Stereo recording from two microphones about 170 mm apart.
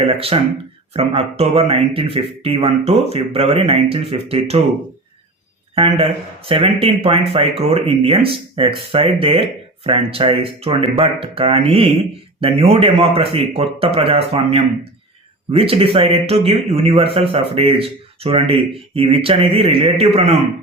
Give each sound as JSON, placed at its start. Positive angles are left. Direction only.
{"t": 0.1, "sound": "speech", "side_deg": -35}
{"t": 5.7, "sound": "speech", "side_deg": -35}